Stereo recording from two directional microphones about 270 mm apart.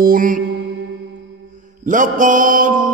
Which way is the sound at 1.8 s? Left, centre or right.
Right.